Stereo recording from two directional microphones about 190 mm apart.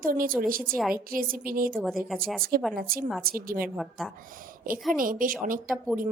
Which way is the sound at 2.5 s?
50° right (ahead or behind).